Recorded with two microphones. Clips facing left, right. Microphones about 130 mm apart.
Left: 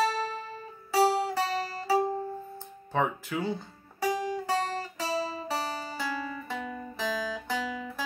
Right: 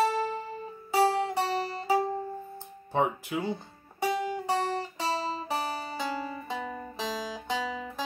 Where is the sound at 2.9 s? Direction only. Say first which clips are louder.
Right 1 dB; 20° right (ahead or behind).